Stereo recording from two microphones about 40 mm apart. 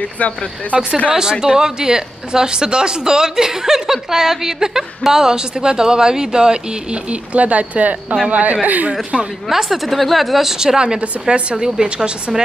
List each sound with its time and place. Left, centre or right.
0.0 s speech: left
0.7 s speech: right
1.4 s speech: centre; by 8.9 s right
9.1 s speech: centre
9.5 s speech: centre